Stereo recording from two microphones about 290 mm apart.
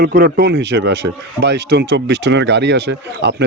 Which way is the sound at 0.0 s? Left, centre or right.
Right.